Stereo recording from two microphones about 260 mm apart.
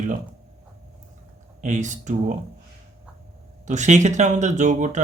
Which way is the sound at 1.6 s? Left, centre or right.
Right.